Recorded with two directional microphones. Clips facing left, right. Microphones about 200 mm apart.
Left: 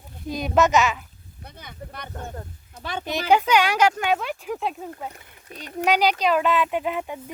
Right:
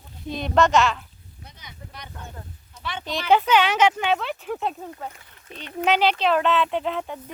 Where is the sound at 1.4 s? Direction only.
55° left (ahead or behind).